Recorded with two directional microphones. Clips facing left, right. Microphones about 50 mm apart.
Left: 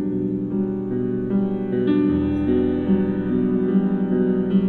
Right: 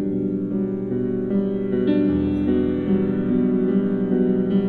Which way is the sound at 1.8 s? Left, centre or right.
Centre.